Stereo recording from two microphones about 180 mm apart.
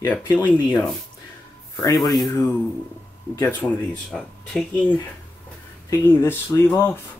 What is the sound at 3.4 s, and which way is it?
Speech, 15° left (ahead or behind).